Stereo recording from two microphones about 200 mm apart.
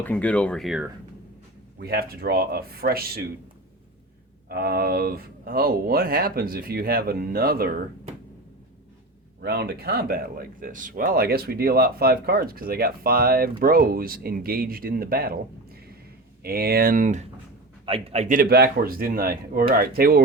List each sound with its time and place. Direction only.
0.0 s speech: 10° left (ahead or behind)
1.8 s speech: 50° right (ahead or behind)
4.4 s speech: 50° right (ahead or behind)
9.4 s speech: 55° right (ahead or behind)